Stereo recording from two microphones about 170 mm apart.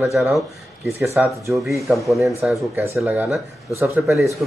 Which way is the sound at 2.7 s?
15° right (ahead or behind).